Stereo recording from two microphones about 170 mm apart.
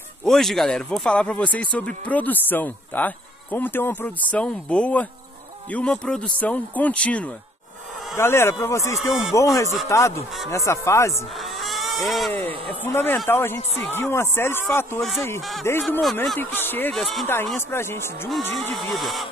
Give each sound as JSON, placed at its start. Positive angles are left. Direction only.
{"t": 0.2, "sound": "speech", "side_deg": 0}
{"t": 8.9, "sound": "speech", "side_deg": 0}
{"t": 9.3, "sound": "speech", "side_deg": 20}
{"t": 11.6, "sound": "vehicle", "side_deg": 0}
{"t": 12.4, "sound": "speech", "side_deg": 10}
{"t": 15.0, "sound": "speech", "side_deg": 0}
{"t": 16.3, "sound": "speech", "side_deg": 10}
{"t": 16.9, "sound": "speech", "side_deg": 0}
{"t": 17.6, "sound": "speech", "side_deg": 15}
{"t": 18.9, "sound": "speech", "side_deg": 0}